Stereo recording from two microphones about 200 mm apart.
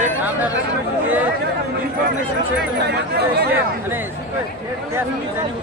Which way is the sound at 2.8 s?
55° right (ahead or behind).